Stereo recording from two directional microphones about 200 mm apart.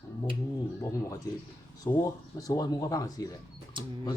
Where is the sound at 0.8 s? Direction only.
15° left (ahead or behind).